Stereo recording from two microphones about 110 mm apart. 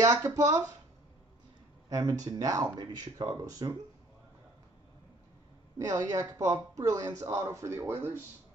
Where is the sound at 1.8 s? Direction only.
35° right (ahead or behind).